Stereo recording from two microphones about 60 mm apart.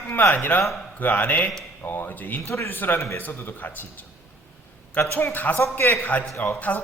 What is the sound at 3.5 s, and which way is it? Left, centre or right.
A man's voice, left.